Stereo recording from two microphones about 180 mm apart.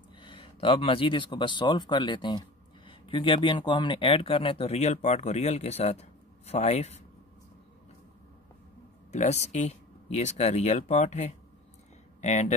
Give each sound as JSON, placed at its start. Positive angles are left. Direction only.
{"t": 0.2, "sound": "speech", "side_deg": 30}
{"t": 9.1, "sound": "speech", "side_deg": 40}